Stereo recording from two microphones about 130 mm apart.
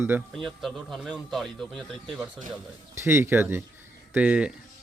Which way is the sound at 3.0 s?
20° right (ahead or behind).